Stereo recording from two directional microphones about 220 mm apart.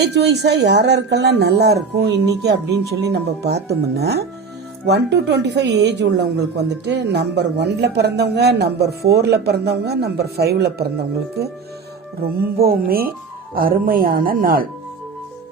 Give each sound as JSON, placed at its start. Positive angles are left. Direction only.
{"t": 0.0, "sound": "speech", "side_deg": -50}